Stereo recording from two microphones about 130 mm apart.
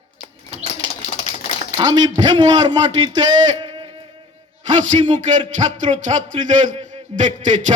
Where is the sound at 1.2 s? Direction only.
60° left (ahead or behind).